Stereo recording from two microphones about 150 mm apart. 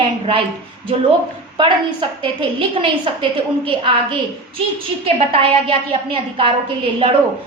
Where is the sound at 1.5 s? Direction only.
30° right (ahead or behind).